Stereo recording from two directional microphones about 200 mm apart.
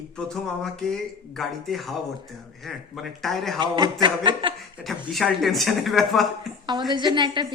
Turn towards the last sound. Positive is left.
turn(degrees=-20)  # may be behind; listen again after turning